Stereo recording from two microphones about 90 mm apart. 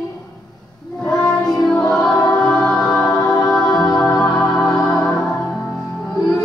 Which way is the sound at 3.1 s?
45° left (ahead or behind).